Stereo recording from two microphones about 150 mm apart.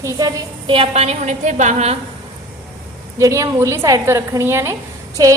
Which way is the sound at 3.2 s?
20° right (ahead or behind).